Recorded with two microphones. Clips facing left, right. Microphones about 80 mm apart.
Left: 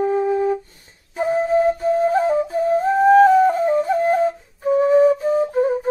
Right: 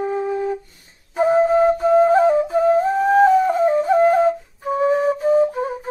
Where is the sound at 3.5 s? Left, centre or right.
Right.